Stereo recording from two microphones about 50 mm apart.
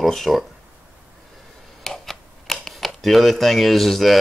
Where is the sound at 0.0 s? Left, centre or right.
Centre.